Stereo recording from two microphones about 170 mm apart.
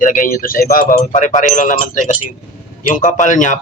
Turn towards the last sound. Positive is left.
turn(degrees=50)  # may be behind; listen again after turning